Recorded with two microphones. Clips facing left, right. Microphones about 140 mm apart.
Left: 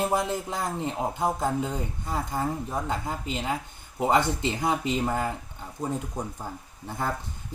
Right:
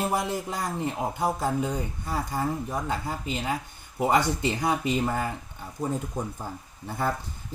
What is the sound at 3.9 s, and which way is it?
Speech, 20° left (ahead or behind).